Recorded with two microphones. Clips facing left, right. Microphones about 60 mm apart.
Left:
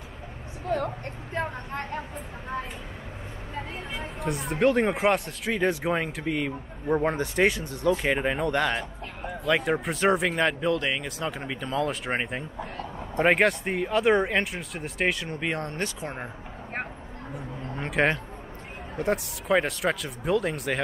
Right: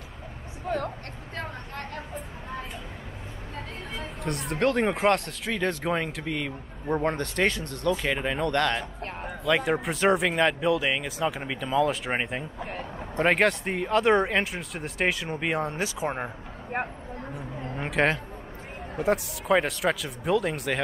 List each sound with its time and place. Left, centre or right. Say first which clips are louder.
0.7 s speech: left 2 dB; centre
1.3 s a woman's voice: left 5 dB; left
4.0 s speech: left 1 dB; centre
17.7 s a sound: even; centre
18.9 s speech: right 2 dB; centre